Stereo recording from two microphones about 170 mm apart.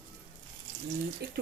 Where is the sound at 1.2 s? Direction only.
70° right (ahead or behind).